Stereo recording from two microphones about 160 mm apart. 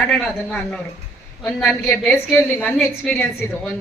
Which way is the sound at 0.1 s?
5° left (ahead or behind).